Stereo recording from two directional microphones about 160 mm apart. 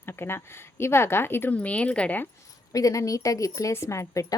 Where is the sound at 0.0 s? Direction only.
15° left (ahead or behind).